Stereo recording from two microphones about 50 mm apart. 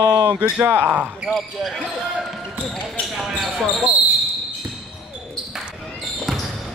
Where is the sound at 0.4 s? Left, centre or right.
Right.